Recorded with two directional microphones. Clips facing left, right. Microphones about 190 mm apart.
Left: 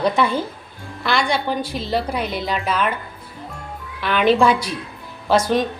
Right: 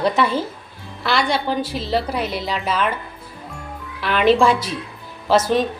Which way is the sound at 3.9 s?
Centre (ahead or behind).